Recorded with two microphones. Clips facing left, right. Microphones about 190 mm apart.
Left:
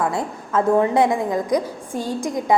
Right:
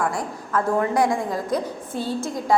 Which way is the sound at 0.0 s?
25° left (ahead or behind).